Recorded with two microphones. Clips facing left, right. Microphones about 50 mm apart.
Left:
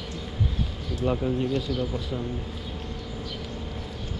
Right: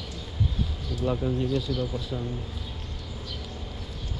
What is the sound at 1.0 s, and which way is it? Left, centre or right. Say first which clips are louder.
Speech: left 1 dB; left.